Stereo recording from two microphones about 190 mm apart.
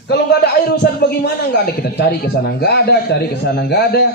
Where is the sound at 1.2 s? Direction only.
55° left (ahead or behind).